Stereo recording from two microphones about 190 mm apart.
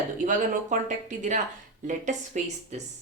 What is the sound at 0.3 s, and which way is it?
Speech, 40° right (ahead or behind).